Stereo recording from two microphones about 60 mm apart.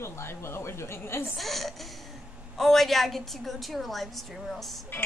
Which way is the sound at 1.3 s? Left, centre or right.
Centre.